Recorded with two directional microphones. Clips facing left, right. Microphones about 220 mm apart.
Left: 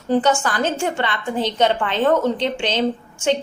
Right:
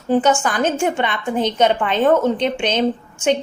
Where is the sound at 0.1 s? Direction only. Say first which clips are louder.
Right 2 dB; 15° right (ahead or behind).